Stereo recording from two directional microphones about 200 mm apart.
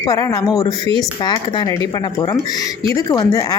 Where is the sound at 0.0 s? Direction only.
20° left (ahead or behind).